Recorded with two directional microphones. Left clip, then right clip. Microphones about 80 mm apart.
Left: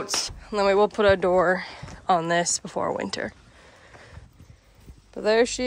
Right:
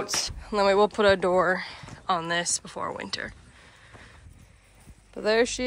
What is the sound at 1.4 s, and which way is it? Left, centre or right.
Speech, left.